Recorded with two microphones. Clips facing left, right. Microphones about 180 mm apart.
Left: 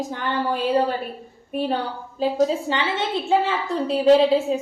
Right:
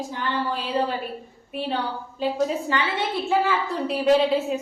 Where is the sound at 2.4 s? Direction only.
25° left (ahead or behind).